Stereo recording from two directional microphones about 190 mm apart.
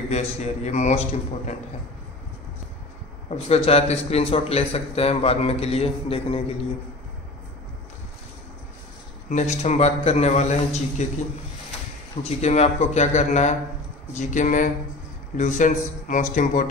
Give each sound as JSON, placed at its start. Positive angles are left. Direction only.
{"t": 0.1, "sound": "a man's voice", "side_deg": 35}
{"t": 3.4, "sound": "a man's voice", "side_deg": 30}
{"t": 9.3, "sound": "a man's voice", "side_deg": 35}
{"t": 12.2, "sound": "a man's voice", "side_deg": 35}